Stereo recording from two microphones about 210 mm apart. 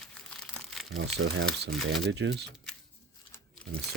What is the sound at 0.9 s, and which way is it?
Speech, 60° right (ahead or behind).